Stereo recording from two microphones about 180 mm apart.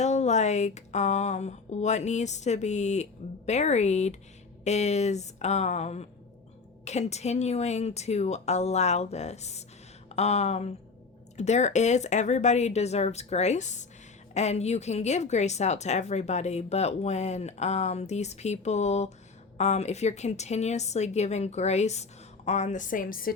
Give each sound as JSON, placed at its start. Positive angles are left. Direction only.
{"t": 0.0, "sound": "a woman's voice", "side_deg": 40}